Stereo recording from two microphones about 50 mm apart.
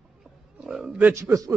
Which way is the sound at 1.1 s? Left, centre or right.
Right.